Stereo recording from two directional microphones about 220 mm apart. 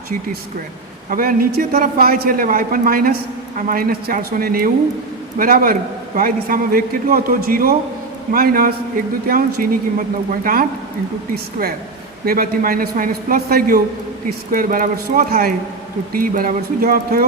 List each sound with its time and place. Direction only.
1.1 s a man's voice: 40° right (ahead or behind)
12.2 s a man's voice: 40° right (ahead or behind)